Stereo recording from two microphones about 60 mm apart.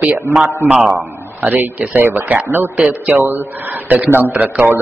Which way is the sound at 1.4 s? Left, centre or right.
Right.